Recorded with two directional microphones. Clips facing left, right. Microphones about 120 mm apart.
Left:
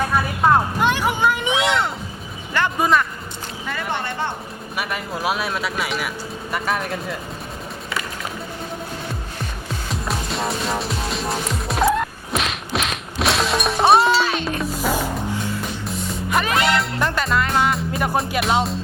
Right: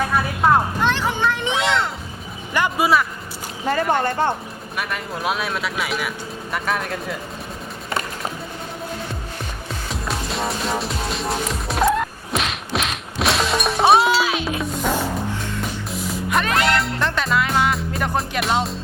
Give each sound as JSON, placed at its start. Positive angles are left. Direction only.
{"t": 0.8, "sound": "a sound", "side_deg": 10}
{"t": 1.5, "sound": "speech", "side_deg": 0}
{"t": 2.5, "sound": "speech", "side_deg": -15}
{"t": 3.7, "sound": "speech", "side_deg": -40}
{"t": 4.8, "sound": "speech", "side_deg": 5}
{"t": 9.9, "sound": "music", "side_deg": 0}